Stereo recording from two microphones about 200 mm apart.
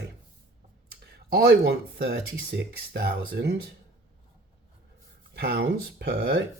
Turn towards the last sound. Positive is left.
turn(degrees=-55)  # may be behind; listen again after turning